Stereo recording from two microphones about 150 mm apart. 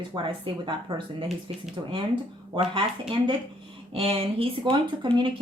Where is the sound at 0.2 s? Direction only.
35° right (ahead or behind).